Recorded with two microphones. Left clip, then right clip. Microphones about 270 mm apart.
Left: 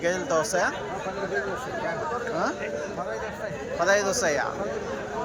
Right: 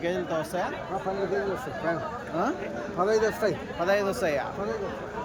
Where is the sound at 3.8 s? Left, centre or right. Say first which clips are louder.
Left 3 dB; centre.